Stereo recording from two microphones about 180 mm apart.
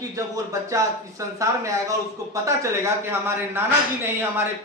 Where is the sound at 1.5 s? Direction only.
15° right (ahead or behind).